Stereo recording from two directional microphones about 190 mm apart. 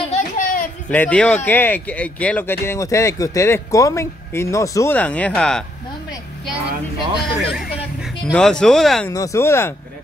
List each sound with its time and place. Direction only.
0.1 s a sound: 45° left (ahead or behind)
0.8 s speech: 5° left (ahead or behind)
7.2 s speech: centre (ahead or behind)
9.1 s speech: 15° left (ahead or behind)